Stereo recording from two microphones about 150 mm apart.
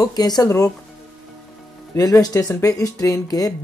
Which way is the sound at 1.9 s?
25° left (ahead or behind).